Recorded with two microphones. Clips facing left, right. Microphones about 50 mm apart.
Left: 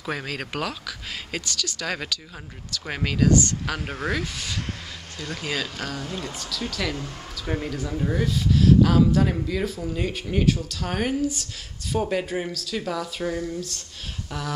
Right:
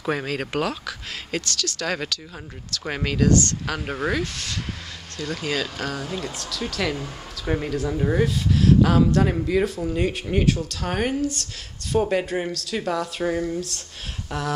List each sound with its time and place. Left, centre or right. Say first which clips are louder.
0.0 s speech: right 4 dB; centre
1.4 s speech: right 2 dB; centre
2.9 s speech: right 1 dB; centre
3.3 s speech: right 1 dB; centre
3.6 s speech: right 2 dB; centre
4.2 s speech: right 2 dB; centre
5.9 s speech: right 3 dB; centre
7.7 s speech: right 4 dB; centre
8.0 s speech: right 4 dB; centre
8.3 s speech: even; centre
11.1 s speech: even; centre
11.9 s speech: right 3 dB; centre
13.3 s speech: right 5 dB; centre
13.6 s speech: right 3 dB; centre